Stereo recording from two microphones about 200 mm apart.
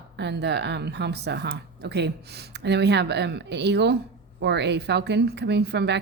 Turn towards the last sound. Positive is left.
turn(degrees=-60)  # may be behind; listen again after turning